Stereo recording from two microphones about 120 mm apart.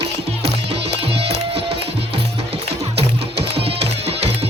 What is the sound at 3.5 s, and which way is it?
Music, 55° right (ahead or behind).